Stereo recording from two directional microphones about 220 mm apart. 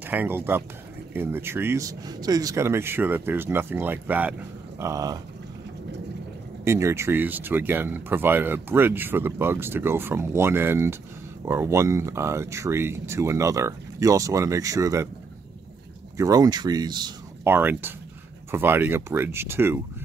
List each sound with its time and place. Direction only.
0.0 s speech: 10° right (ahead or behind)
6.6 s speech: 10° right (ahead or behind)
16.2 s speech: 15° right (ahead or behind)